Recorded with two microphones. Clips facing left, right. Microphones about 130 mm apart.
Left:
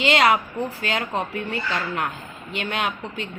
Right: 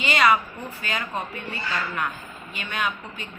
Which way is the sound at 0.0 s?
70° left (ahead or behind).